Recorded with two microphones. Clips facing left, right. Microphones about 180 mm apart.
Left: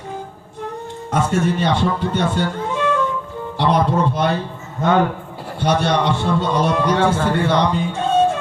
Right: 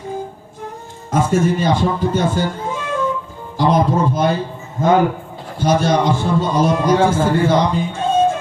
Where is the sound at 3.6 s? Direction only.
65° left (ahead or behind).